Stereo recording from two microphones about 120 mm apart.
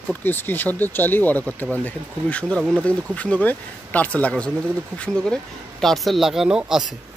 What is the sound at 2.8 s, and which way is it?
Speech, 10° left (ahead or behind).